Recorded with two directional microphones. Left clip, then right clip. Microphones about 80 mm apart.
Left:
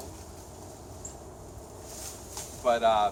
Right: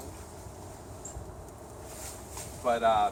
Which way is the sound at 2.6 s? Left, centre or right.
Centre.